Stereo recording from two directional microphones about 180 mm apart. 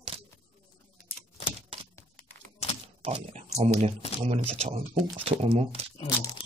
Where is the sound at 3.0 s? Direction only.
35° right (ahead or behind).